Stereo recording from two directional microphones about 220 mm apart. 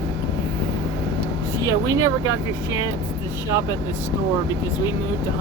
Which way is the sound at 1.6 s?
15° right (ahead or behind).